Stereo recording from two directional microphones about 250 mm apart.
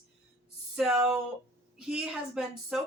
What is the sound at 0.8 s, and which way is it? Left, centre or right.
Speech, centre.